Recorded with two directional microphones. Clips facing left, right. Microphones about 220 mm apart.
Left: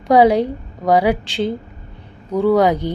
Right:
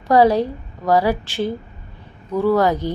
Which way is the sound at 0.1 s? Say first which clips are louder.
Left 2 dB; 15° left (ahead or behind).